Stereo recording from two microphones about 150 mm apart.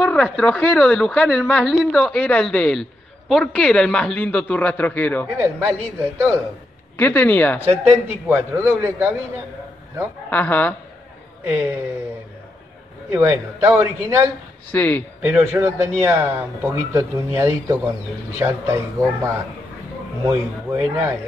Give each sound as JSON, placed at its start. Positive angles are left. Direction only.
{"t": 0.0, "sound": "a man's voice", "side_deg": 5}
{"t": 2.1, "sound": "a man's voice", "side_deg": 10}
{"t": 5.4, "sound": "a man's voice", "side_deg": -15}
{"t": 7.0, "sound": "a man's voice", "side_deg": 10}
{"t": 7.8, "sound": "a man's voice", "side_deg": -15}
{"t": 10.3, "sound": "a man's voice", "side_deg": 10}
{"t": 13.1, "sound": "a man's voice", "side_deg": -15}
{"t": 14.7, "sound": "a man's voice", "side_deg": 10}
{"t": 15.2, "sound": "a man's voice", "side_deg": -15}